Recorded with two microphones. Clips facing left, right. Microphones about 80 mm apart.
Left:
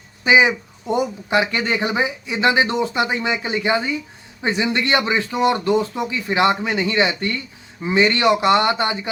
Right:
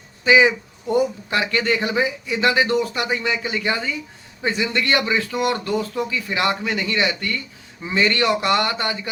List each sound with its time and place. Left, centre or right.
0.3 s speech: centre